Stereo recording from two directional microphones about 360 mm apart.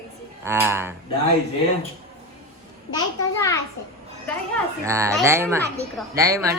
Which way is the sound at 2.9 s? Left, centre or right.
Centre.